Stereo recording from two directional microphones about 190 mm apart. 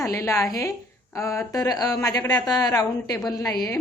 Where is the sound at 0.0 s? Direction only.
15° left (ahead or behind).